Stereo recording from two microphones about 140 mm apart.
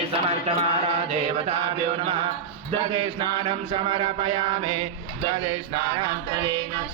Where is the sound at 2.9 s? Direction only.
40° right (ahead or behind).